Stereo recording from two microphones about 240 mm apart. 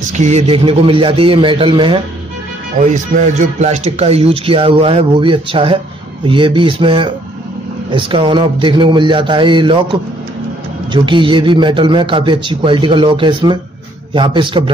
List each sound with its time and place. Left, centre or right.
0.1 s speech: right
10.9 s speech: centre